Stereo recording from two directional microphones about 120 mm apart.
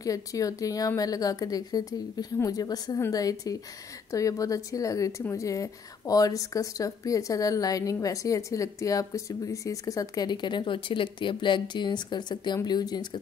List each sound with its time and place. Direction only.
0.0 s speech: 30° left (ahead or behind)